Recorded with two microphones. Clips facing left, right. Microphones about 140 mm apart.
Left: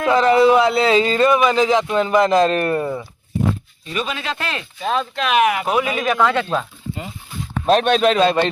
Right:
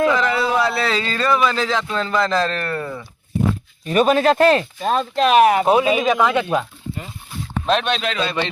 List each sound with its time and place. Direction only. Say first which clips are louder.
0.1 s speech: left 6 dB; 30° left (ahead or behind)
3.8 s speech: right 10 dB; 45° right (ahead or behind); by 6.7 s 15° right (ahead or behind)
7.7 s a man's voice: left 6 dB; 45° left (ahead or behind)